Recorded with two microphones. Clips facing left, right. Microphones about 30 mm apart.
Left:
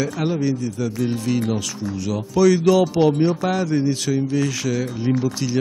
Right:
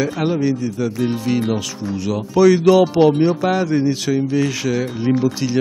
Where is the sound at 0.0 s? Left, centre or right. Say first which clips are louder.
Right 3 dB; centre.